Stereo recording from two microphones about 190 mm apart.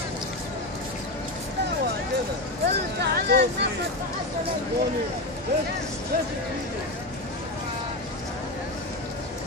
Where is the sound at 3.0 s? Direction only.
60° right (ahead or behind).